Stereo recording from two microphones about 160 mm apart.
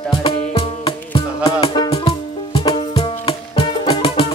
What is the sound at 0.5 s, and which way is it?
Music, 35° left (ahead or behind).